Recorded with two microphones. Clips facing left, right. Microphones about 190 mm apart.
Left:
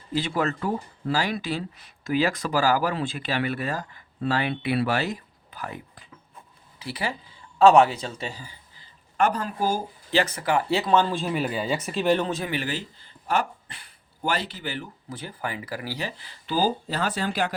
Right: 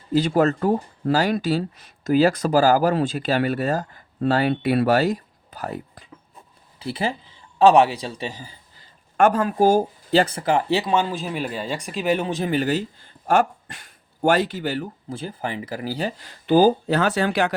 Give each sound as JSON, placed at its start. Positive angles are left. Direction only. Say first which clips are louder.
{"t": 0.1, "sound": "speech", "louder": "right 7 dB", "side_deg": -45}
{"t": 7.6, "sound": "speech", "louder": "right 1 dB", "side_deg": -15}
{"t": 9.1, "sound": "speech", "louder": "right 6 dB", "side_deg": -50}
{"t": 10.2, "sound": "speech", "louder": "right 4 dB", "side_deg": -30}
{"t": 12.5, "sound": "speech", "louder": "right 8 dB", "side_deg": -40}
{"t": 15.1, "sound": "speech", "louder": "right 4 dB", "side_deg": -25}
{"t": 16.1, "sound": "speech", "louder": "right 12 dB", "side_deg": -50}